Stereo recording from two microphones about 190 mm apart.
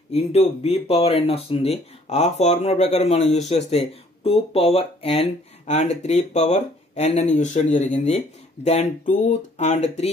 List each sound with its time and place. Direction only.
0.1 s speech: 35° left (ahead or behind)